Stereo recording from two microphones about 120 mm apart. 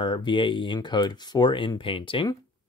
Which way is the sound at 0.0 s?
40° left (ahead or behind).